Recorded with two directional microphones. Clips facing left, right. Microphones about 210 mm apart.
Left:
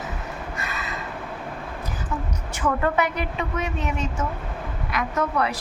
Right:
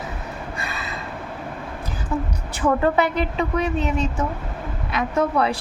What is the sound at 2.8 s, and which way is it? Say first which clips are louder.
A woman's voice: right 4 dB; 30° right (ahead or behind).